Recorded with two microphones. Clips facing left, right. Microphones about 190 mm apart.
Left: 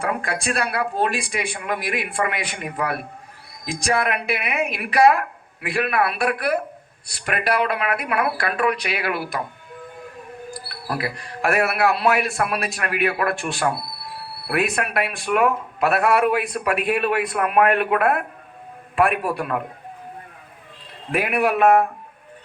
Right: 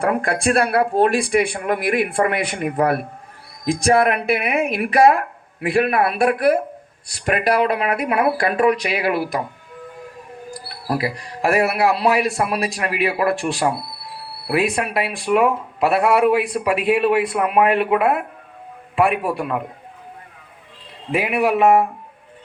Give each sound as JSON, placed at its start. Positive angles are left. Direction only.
{"t": 0.0, "sound": "a man's voice", "side_deg": -60}
{"t": 11.4, "sound": "a man's voice", "side_deg": -35}
{"t": 17.8, "sound": "a man's voice", "side_deg": -10}
{"t": 19.0, "sound": "speech", "side_deg": -25}
{"t": 21.1, "sound": "speech", "side_deg": -25}